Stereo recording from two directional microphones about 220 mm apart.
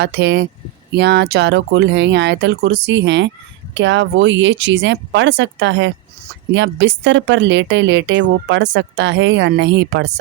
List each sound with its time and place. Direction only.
0.0 s speech: 50° right (ahead or behind)